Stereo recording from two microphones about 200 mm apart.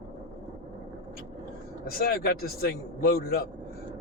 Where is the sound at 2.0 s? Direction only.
50° left (ahead or behind).